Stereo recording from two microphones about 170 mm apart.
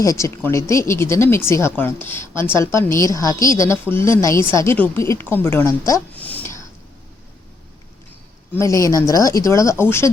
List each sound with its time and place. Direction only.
0.0 s speech: 20° left (ahead or behind)
8.5 s speech: 20° left (ahead or behind)